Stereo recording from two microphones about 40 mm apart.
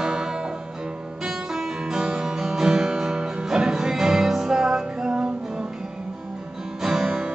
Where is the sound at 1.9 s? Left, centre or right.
Centre.